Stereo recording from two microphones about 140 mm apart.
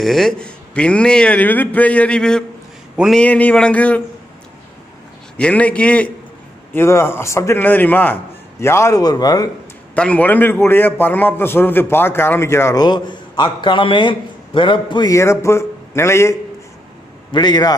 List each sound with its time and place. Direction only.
0.0 s a man's voice: 5° left (ahead or behind)
3.3 s a man's voice: 10° left (ahead or behind)
5.4 s a man's voice: 10° left (ahead or behind); by 9.5 s 25° left (ahead or behind)
9.9 s a man's voice: 10° left (ahead or behind)
12.8 s a man's voice: 35° left (ahead or behind)
15.1 s speech: 20° left (ahead or behind)
17.3 s a man's voice: 30° left (ahead or behind)